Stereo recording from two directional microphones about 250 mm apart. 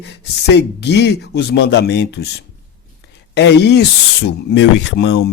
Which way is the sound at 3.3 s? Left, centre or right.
Left.